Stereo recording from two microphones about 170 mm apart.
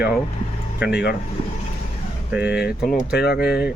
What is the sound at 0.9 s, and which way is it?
Speech, 80° left.